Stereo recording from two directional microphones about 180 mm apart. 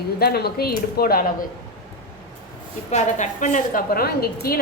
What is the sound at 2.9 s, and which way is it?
A woman's voice, 45° left (ahead or behind).